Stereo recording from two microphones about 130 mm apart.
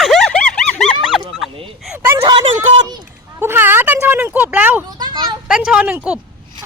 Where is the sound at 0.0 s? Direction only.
Centre (ahead or behind).